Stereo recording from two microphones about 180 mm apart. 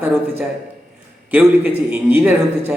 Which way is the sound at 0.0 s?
10° right (ahead or behind).